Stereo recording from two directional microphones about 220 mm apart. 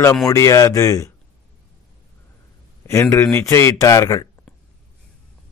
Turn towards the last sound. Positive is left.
turn(degrees=15)  # may be behind; listen again after turning